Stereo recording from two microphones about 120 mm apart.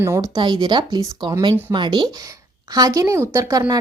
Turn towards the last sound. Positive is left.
turn(degrees=-30)  # may be behind; listen again after turning